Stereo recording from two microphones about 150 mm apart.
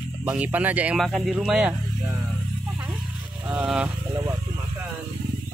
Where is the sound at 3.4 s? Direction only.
10° right (ahead or behind).